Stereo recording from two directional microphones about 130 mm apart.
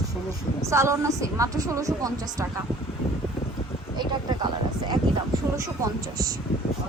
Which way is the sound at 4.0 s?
35° right (ahead or behind).